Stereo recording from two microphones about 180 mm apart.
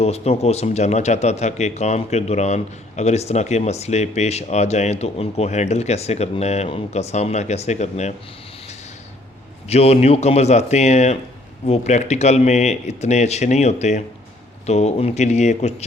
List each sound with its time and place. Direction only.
0.0 s speech: 35° left (ahead or behind)
9.6 s speech: 35° left (ahead or behind)